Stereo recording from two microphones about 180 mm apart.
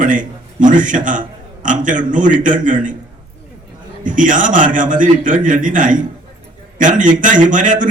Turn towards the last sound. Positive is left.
turn(degrees=-45)  # may be behind; listen again after turning